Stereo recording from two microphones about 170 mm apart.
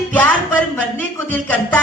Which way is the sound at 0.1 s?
10° left (ahead or behind).